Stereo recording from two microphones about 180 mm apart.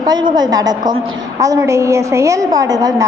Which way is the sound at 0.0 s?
25° right (ahead or behind).